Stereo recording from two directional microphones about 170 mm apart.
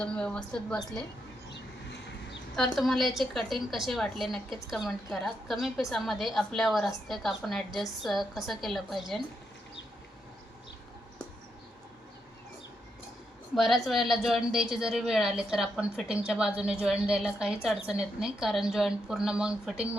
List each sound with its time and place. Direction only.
0.0 s a woman's voice: 5° left (ahead or behind)
1.5 s vehicle: 90° left
2.6 s a woman's voice: centre (ahead or behind)
13.6 s a woman's voice: centre (ahead or behind)